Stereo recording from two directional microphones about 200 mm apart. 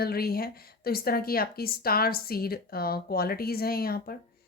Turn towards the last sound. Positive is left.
turn(degrees=50)  # may be behind; listen again after turning